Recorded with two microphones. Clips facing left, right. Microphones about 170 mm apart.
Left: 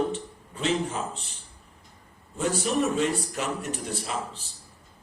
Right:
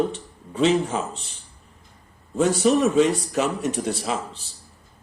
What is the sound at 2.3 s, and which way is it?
A man's voice, 90° right.